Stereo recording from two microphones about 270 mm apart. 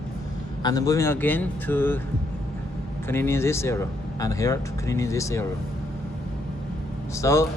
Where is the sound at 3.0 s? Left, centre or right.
Centre.